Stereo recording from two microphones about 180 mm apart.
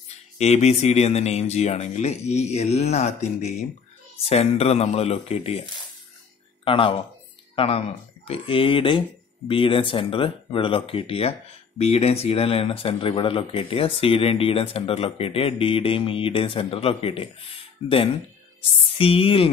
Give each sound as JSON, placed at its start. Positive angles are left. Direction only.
{"t": 0.4, "sound": "speech", "side_deg": 35}
{"t": 6.6, "sound": "speech", "side_deg": 30}